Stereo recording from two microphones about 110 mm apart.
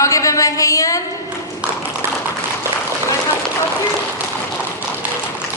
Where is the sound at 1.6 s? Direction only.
10° right (ahead or behind).